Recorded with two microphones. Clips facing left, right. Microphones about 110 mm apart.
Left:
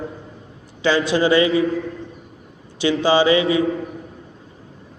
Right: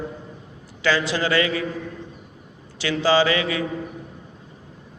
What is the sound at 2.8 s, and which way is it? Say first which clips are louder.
Speech: left 3 dB; 20° left (ahead or behind).